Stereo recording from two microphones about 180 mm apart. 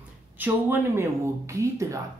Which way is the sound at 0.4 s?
10° right (ahead or behind).